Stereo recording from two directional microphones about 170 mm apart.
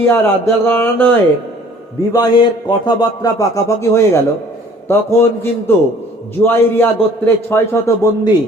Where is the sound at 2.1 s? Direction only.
25° left (ahead or behind).